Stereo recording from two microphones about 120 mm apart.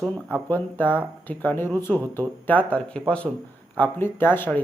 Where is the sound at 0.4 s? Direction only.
15° left (ahead or behind).